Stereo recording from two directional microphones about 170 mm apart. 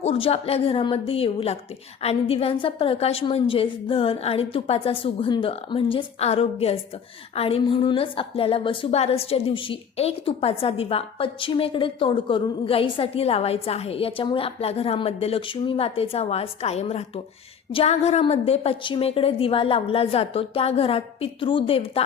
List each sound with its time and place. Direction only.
0.0 s a woman's voice: 35° left (ahead or behind)